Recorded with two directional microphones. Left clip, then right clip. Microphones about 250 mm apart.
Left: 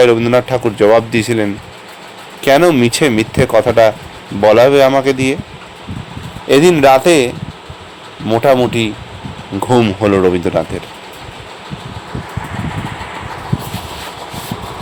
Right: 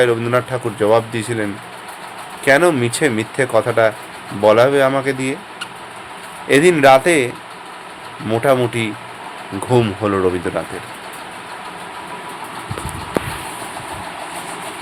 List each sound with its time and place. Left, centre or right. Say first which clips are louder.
0.0 s speech: left 6 dB; left
6.5 s speech: left 2 dB; centre
8.3 s speech: left 5 dB; centre